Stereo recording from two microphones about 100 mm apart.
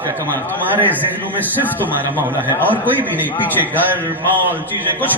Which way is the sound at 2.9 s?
15° right (ahead or behind).